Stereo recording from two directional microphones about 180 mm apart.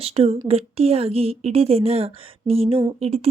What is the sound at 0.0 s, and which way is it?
A woman's voice, 35° right (ahead or behind).